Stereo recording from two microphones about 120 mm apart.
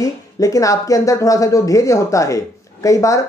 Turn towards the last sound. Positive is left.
turn(degrees=25)  # may be behind; listen again after turning